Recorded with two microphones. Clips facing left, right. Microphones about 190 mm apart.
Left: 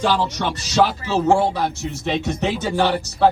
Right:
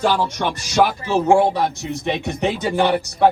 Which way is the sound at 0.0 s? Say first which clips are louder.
Right 1 dB; 10° right (ahead or behind).